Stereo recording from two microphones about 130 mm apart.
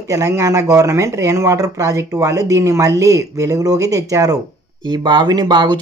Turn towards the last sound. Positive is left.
turn(degrees=-35)  # may be behind; listen again after turning